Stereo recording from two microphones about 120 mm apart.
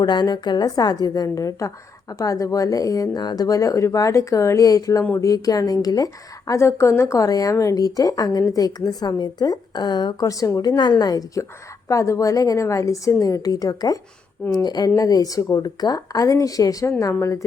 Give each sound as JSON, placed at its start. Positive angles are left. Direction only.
{"t": 0.0, "sound": "a woman's voice", "side_deg": 35}